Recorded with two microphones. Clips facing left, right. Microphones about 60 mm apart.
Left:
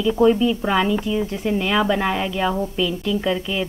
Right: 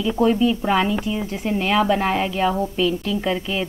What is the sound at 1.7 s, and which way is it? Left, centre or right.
Speech, centre.